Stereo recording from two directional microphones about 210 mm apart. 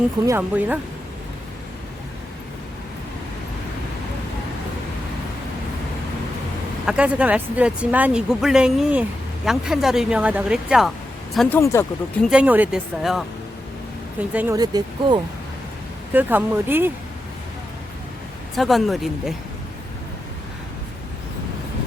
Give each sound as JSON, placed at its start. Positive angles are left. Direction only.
{"t": 0.3, "sound": "speech", "side_deg": -10}
{"t": 6.8, "sound": "speech", "side_deg": -5}
{"t": 11.3, "sound": "speech", "side_deg": 10}
{"t": 12.2, "sound": "speech", "side_deg": -5}
{"t": 14.3, "sound": "speech", "side_deg": -15}
{"t": 16.1, "sound": "speech", "side_deg": -10}
{"t": 18.5, "sound": "speech", "side_deg": 0}